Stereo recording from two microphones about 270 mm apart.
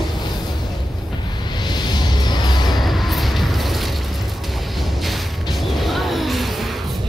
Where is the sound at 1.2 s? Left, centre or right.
Centre.